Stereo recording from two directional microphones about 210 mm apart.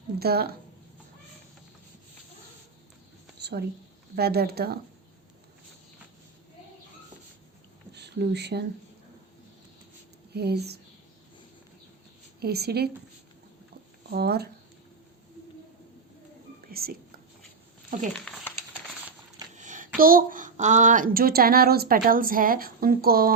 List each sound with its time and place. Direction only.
0.2 s speech: 50° right (ahead or behind)
3.4 s speech: 50° right (ahead or behind)
7.9 s speech: 55° right (ahead or behind)
10.3 s speech: 50° right (ahead or behind)
12.4 s speech: 50° right (ahead or behind)
14.1 s speech: 50° right (ahead or behind)
16.7 s whispering: 45° right (ahead or behind)
18.1 s speech: 5° left (ahead or behind)
19.5 s a sound: 35° right (ahead or behind)
20.0 s speech: 45° right (ahead or behind)